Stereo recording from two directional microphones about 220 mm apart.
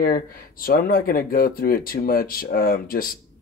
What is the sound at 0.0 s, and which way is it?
Speech, 40° left (ahead or behind).